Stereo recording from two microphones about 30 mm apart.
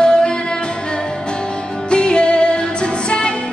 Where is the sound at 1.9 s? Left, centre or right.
Left.